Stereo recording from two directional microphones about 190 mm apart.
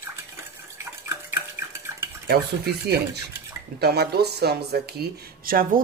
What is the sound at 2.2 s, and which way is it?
Stir, 55° right (ahead or behind).